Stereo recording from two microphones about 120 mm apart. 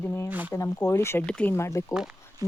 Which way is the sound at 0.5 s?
25° left (ahead or behind).